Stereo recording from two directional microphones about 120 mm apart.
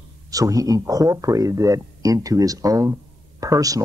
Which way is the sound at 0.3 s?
30° right (ahead or behind).